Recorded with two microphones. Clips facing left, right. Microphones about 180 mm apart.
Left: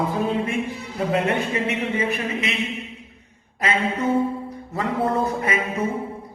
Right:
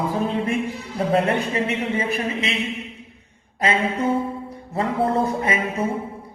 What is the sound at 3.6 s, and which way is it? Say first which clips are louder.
A man's voice: right 2 dB; 30° right (ahead or behind).